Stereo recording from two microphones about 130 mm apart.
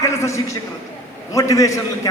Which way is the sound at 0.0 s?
20° left (ahead or behind).